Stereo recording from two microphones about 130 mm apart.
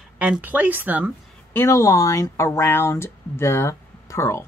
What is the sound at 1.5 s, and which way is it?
Speech, 20° left (ahead or behind).